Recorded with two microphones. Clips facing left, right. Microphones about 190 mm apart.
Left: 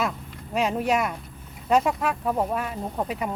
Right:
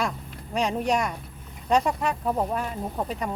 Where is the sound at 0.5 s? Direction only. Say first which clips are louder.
Left 1 dB; 5° left (ahead or behind).